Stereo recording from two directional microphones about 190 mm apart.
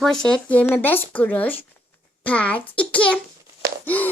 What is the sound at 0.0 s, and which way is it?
A woman's voice, 5° left (ahead or behind).